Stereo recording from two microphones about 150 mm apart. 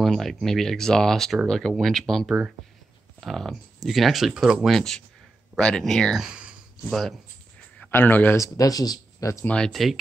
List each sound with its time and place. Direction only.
0.0 s speech: centre (ahead or behind)
7.8 s speech: 10° left (ahead or behind)
9.5 s speech: 5° left (ahead or behind)